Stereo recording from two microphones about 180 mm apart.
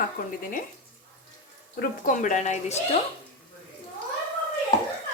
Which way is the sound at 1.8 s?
45° left (ahead or behind).